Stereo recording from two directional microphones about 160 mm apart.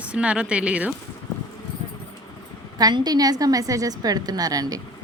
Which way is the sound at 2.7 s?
25° right (ahead or behind).